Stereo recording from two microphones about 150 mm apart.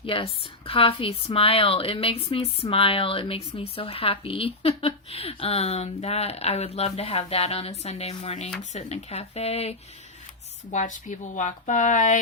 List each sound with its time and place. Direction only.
0.0 s a woman's voice: 35° left (ahead or behind)
10.7 s speech: 55° left (ahead or behind)